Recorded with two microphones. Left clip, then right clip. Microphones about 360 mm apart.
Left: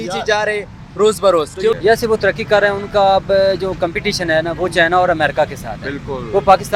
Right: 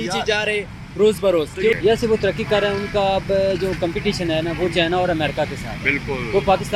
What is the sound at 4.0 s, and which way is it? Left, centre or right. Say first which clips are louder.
Speech: left 4 dB; left.